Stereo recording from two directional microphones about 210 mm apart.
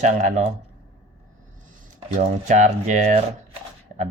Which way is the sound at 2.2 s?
35° right (ahead or behind).